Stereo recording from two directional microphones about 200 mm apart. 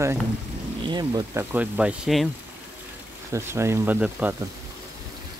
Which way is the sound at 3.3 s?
15° right (ahead or behind).